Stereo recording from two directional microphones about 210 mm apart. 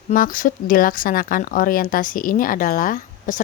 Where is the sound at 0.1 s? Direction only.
40° left (ahead or behind).